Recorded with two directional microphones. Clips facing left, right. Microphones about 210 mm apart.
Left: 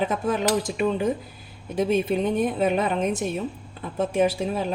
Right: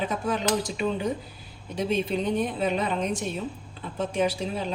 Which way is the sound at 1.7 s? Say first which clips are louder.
Left 4 dB; 50° left (ahead or behind).